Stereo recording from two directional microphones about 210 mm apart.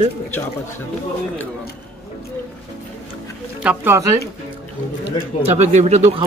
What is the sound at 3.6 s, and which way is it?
Speech, 10° right (ahead or behind).